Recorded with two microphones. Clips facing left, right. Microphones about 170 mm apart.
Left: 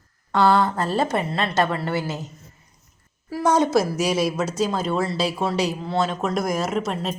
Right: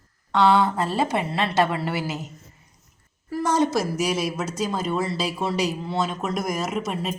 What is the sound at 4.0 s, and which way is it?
Speech, 15° right (ahead or behind).